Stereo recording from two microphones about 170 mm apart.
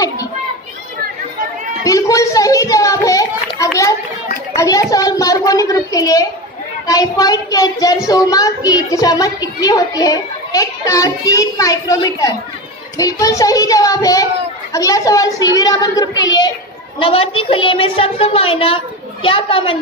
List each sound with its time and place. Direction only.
1.9 s a woman's voice: 20° left (ahead or behind)
17.0 s a woman's voice: 35° left (ahead or behind)